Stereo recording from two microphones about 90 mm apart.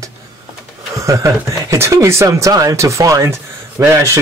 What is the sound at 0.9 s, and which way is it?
Speech, 35° right (ahead or behind).